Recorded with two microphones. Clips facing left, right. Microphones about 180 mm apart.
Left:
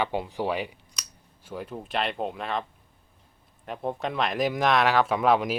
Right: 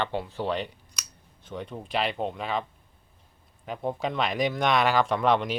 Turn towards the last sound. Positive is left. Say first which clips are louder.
# left 1 dB
turn(degrees=5)  # may be behind; listen again after turning